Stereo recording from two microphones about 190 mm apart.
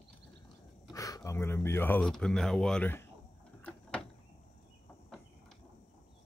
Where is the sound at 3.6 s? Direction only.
5° left (ahead or behind).